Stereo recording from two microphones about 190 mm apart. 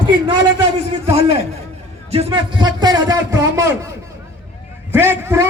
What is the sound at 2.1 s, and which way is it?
A man's voice, 30° right (ahead or behind).